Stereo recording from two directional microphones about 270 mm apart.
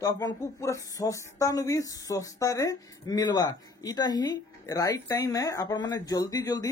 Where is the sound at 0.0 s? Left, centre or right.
Centre.